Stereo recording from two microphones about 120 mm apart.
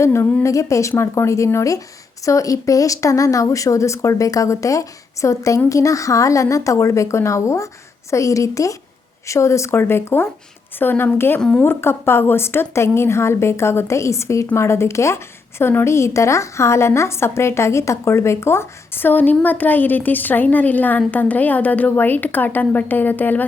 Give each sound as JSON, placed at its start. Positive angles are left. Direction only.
{"t": 0.0, "sound": "a woman's voice", "side_deg": 20}
{"t": 11.3, "sound": "a woman's voice", "side_deg": 5}
{"t": 11.6, "sound": "a woman's voice", "side_deg": 20}